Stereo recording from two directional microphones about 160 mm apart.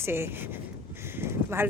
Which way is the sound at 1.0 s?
15° right (ahead or behind).